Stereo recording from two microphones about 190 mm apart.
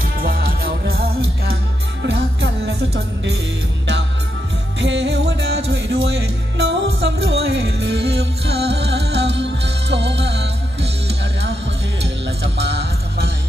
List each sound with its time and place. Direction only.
0.2 s music: 50° right (ahead or behind)
4.7 s music: 70° right (ahead or behind)
12.5 s music: 60° right (ahead or behind)